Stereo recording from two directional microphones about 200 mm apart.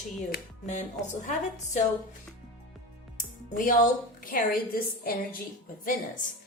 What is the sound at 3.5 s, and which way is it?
Speech, 40° left (ahead or behind).